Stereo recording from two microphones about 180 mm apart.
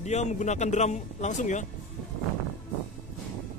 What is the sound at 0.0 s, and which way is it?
Speech, 40° left (ahead or behind).